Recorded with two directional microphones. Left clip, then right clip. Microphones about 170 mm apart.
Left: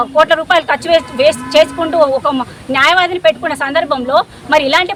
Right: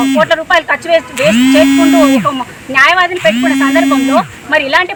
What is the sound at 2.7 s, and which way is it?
Speech, 25° left (ahead or behind).